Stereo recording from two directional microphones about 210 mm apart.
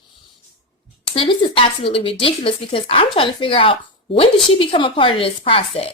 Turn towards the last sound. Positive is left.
turn(degrees=25)  # may be behind; listen again after turning